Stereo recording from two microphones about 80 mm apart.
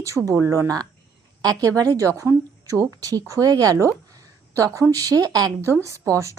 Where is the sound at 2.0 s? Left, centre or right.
Right.